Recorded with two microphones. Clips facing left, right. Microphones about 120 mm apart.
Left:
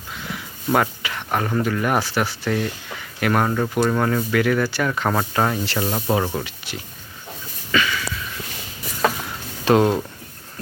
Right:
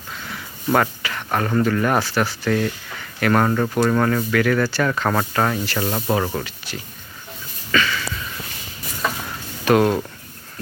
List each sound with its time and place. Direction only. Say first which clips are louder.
0.3 s speech: right 1 dB; 10° left (ahead or behind)
7.7 s a sound: right 1 dB; 10° left (ahead or behind)
9.6 s speech: even; 20° left (ahead or behind)